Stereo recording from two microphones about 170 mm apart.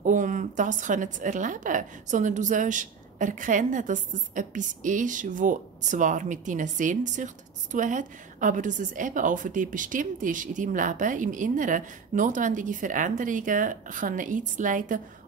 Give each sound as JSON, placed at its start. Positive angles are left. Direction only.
{"t": 0.0, "sound": "a woman's voice", "side_deg": -50}